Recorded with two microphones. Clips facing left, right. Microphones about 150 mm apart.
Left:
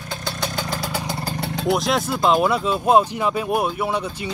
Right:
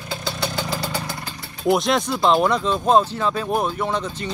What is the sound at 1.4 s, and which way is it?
Vehicle, 75° left (ahead or behind).